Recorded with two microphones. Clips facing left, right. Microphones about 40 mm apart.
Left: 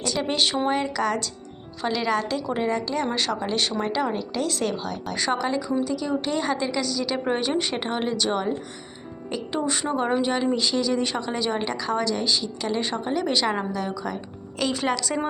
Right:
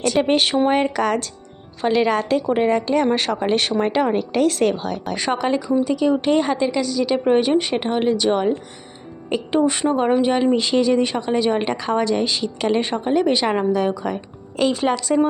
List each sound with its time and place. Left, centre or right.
0.0 s speech: right
5.1 s a woman's voice: right
6.5 s a woman's voice: centre
9.8 s a woman's voice: centre
10.5 s speech: right
11.0 s a woman's voice: centre
11.6 s speech: right
12.8 s a woman's voice: right
13.7 s speech: right
14.7 s a woman's voice: centre